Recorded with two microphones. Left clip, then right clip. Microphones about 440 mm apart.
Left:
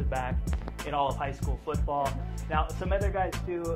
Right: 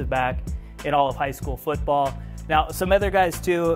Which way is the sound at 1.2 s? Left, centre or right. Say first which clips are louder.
Right 8 dB; right.